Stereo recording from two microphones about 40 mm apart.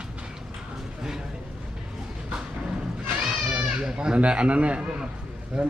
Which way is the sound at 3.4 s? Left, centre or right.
Right.